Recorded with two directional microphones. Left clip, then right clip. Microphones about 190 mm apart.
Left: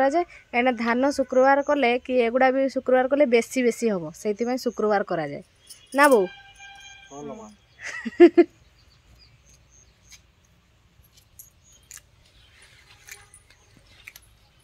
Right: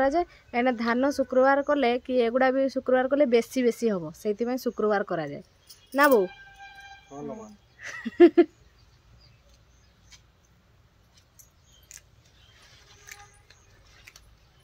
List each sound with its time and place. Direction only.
0.0 s a woman's voice: 20° left (ahead or behind)
10.1 s mouse: 25° left (ahead or behind)